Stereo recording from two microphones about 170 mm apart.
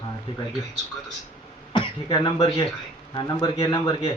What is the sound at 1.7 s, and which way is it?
A man's voice, 25° left (ahead or behind).